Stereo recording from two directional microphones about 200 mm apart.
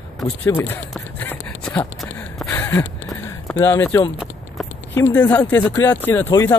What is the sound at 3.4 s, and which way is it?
Speech, 10° left (ahead or behind).